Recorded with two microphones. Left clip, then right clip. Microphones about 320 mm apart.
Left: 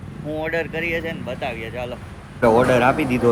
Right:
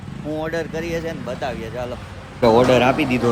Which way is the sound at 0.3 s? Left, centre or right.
Centre.